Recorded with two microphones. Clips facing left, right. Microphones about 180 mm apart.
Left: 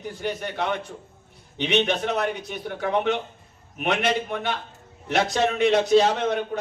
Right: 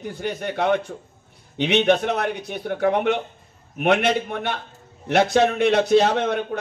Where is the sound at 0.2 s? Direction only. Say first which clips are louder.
Right 4 dB; 55° right (ahead or behind).